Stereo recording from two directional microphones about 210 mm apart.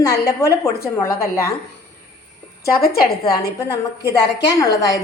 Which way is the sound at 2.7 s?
45° left (ahead or behind).